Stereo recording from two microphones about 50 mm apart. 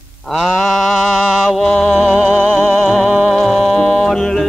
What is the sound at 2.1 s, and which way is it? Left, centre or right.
Music, right.